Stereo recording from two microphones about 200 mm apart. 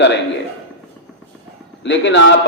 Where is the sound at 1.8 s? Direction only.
60° left (ahead or behind).